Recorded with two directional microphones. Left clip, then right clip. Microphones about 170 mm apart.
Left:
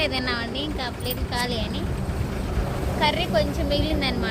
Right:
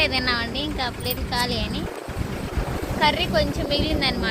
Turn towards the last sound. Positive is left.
turn(degrees=-5)  # may be behind; listen again after turning